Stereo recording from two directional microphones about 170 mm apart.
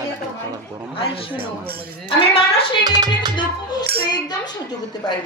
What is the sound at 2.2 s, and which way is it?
Speech, 35° left (ahead or behind).